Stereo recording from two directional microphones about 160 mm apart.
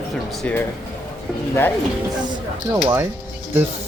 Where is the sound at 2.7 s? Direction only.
15° right (ahead or behind).